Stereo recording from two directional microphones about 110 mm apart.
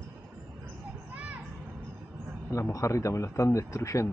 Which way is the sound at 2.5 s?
25° left (ahead or behind).